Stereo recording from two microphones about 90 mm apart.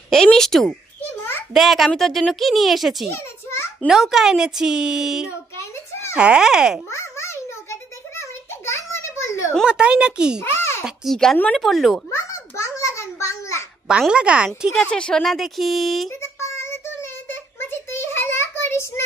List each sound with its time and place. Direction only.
0.1 s speech: 5° left (ahead or behind)
5.6 s a sound: 30° left (ahead or behind)
6.1 s speech: 10° right (ahead or behind)
6.9 s a sound: 30° left (ahead or behind)
9.7 s speech: 10° right (ahead or behind)
10.4 s a sound: 30° left (ahead or behind)
11.1 s speech: 5° left (ahead or behind)
12.1 s a sound: 35° left (ahead or behind)
13.8 s speech: 10° right (ahead or behind)
14.8 s speech: 10° left (ahead or behind)
15.3 s speech: centre (ahead or behind)
16.2 s child singing: 30° left (ahead or behind)